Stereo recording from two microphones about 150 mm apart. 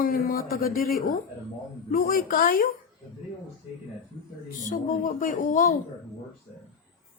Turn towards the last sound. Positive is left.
turn(degrees=60)  # may be behind; listen again after turning